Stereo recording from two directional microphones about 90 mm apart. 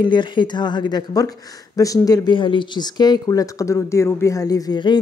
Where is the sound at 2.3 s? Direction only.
65° left (ahead or behind).